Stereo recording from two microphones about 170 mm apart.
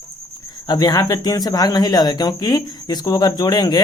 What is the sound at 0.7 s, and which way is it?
Speech, 25° left (ahead or behind).